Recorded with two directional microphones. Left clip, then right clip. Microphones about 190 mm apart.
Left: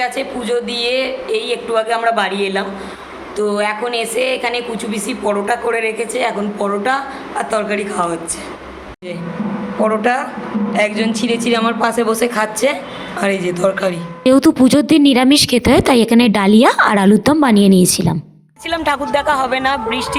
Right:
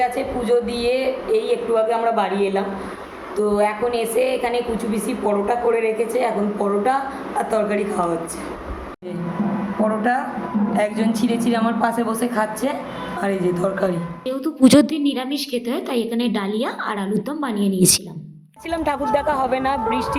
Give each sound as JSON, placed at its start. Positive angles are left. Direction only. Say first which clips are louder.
{"t": 0.0, "sound": "a woman's voice", "louder": "left 1 dB", "side_deg": -5}
{"t": 9.8, "sound": "a woman's voice", "louder": "left 5 dB", "side_deg": 10}
{"t": 14.3, "sound": "a woman's voice", "louder": "left 15 dB", "side_deg": 60}
{"t": 14.6, "sound": "a woman's voice", "louder": "left 2 dB", "side_deg": 0}
{"t": 14.9, "sound": "a woman's voice", "louder": "left 12 dB", "side_deg": 60}
{"t": 18.7, "sound": "a woman's voice", "louder": "left 4 dB", "side_deg": 0}